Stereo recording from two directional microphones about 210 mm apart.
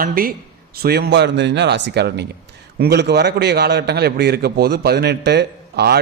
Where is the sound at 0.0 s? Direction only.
45° right (ahead or behind).